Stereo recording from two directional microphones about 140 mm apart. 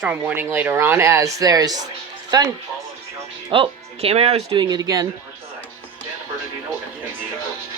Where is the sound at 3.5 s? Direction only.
40° right (ahead or behind).